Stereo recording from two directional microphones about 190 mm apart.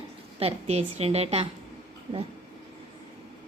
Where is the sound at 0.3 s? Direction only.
30° right (ahead or behind).